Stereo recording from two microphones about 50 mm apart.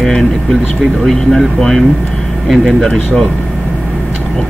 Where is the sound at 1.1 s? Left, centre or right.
Centre.